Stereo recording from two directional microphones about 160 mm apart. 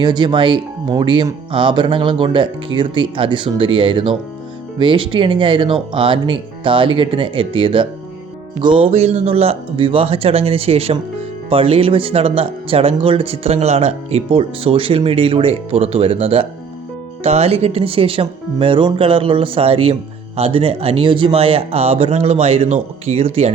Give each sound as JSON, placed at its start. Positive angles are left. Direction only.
{"t": 0.0, "sound": "speech", "side_deg": -30}